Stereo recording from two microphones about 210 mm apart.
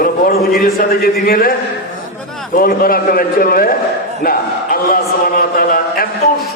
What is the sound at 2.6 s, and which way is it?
A man's voice, 45° left (ahead or behind).